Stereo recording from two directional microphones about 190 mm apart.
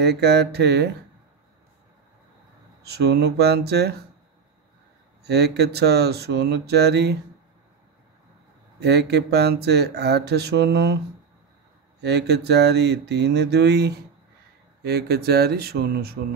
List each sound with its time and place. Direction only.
0.0 s speech: 60° right (ahead or behind)
2.8 s speech: 55° right (ahead or behind)
5.2 s speech: 60° right (ahead or behind)
8.7 s speech: 60° right (ahead or behind)
12.0 s speech: 60° right (ahead or behind)